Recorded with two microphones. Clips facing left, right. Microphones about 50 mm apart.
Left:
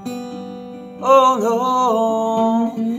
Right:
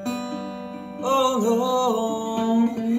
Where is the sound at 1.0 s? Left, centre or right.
Left.